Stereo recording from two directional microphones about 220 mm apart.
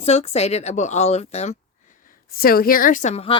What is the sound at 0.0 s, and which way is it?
Speech, 30° left (ahead or behind).